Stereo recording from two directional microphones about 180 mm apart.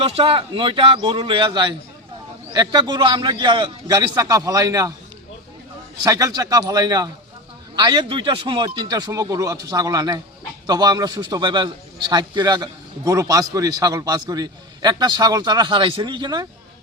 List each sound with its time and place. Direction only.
0.0 s a man's voice: 30° right (ahead or behind)
6.0 s a man's voice: 20° right (ahead or behind)